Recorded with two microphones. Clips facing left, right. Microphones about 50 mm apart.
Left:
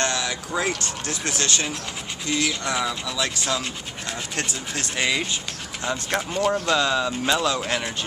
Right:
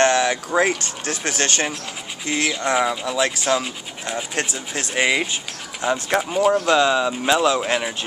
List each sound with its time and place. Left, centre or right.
0.0 s a sound: right
0.6 s speech: right
4.9 s speech: centre